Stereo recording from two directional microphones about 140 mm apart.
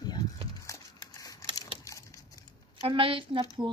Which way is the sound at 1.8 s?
25° left (ahead or behind).